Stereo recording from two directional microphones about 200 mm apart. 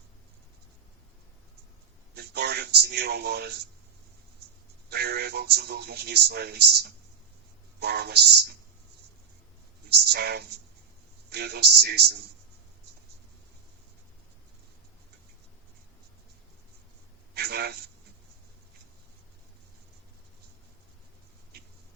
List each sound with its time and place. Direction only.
2.1 s speech: 55° right (ahead or behind)
4.9 s speech: 55° right (ahead or behind)
9.9 s speech: 50° right (ahead or behind)
17.3 s a sound: 55° right (ahead or behind)